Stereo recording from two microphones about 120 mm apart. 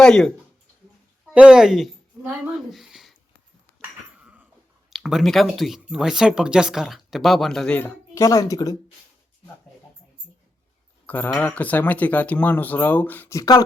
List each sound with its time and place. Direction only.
0.0 s speech: 5° left (ahead or behind)
1.3 s speech: 10° right (ahead or behind)
3.8 s dog: 10° right (ahead or behind)
4.9 s speech: centre (ahead or behind)
7.8 s speech: 20° left (ahead or behind)
11.0 s speech: 15° left (ahead or behind)
13.4 s speech: 35° left (ahead or behind)